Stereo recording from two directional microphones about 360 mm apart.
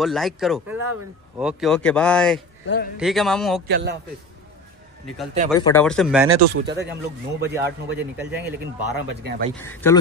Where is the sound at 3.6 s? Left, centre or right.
Right.